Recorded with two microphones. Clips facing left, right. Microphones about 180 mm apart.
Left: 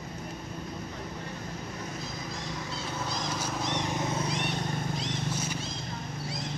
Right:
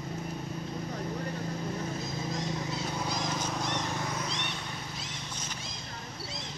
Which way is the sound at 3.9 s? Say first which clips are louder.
Left 4 dB; 25° left (ahead or behind).